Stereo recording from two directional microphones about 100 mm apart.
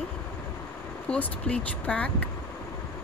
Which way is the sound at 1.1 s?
10° left (ahead or behind).